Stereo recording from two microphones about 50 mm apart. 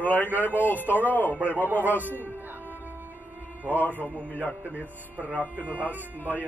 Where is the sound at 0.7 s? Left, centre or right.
Right.